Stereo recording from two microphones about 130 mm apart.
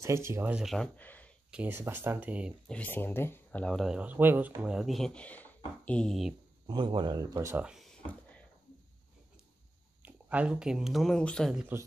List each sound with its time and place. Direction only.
0.0 s speech: 20° right (ahead or behind); by 0.8 s 5° right (ahead or behind)
0.9 s a sound: 10° left (ahead or behind)
1.5 s speech: 10° right (ahead or behind)
2.7 s speech: 15° left (ahead or behind)
3.6 s speech: centre (ahead or behind)
6.7 s speech: 35° right (ahead or behind)
7.5 s speech: 5° right (ahead or behind)
8.1 s a sound: 10° left (ahead or behind)
10.0 s speech: 10° right (ahead or behind); by 11.5 s 5° left (ahead or behind)